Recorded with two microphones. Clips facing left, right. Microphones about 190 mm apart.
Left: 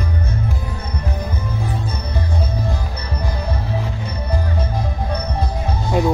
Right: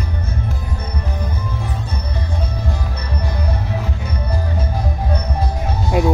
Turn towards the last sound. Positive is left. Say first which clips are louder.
# right 1 dB
turn(degrees=-5)  # may be behind; listen again after turning